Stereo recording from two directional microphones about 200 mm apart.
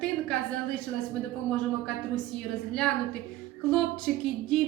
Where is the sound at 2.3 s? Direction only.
5° left (ahead or behind).